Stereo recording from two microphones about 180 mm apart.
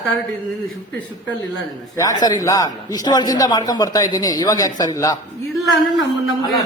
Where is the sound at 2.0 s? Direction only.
20° left (ahead or behind).